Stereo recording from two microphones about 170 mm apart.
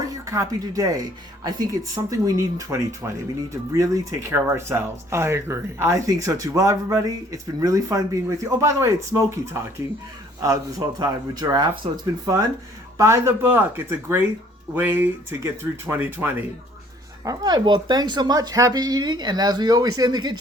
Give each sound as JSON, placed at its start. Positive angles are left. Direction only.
{"t": 0.0, "sound": "speech", "side_deg": -20}
{"t": 17.2, "sound": "speech", "side_deg": -25}